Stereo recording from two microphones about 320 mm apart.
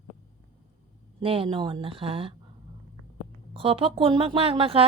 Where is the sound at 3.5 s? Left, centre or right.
Centre.